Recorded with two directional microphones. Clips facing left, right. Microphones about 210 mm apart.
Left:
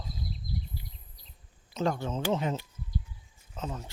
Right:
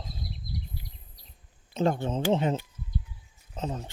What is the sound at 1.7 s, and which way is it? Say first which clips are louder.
Speech: right 4 dB; 25° right (ahead or behind).